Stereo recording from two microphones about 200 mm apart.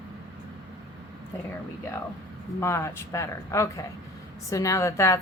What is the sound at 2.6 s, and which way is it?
Speech, 15° left (ahead or behind).